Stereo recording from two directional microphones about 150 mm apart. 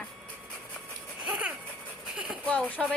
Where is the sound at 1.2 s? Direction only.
5° right (ahead or behind).